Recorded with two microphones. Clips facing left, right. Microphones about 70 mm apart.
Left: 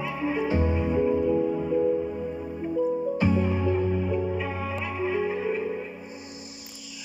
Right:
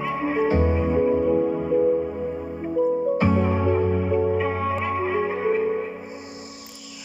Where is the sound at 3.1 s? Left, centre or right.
Right.